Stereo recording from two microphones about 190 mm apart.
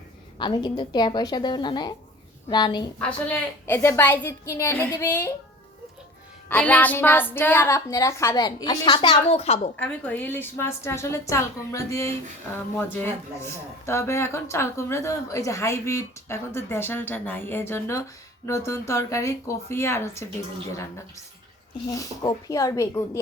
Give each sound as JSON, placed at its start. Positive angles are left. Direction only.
{"t": 0.3, "sound": "speech", "side_deg": 25}
{"t": 3.0, "sound": "speech", "side_deg": 5}
{"t": 6.5, "sound": "speech", "side_deg": 5}
{"t": 9.7, "sound": "speech", "side_deg": 10}
{"t": 21.8, "sound": "speech", "side_deg": 20}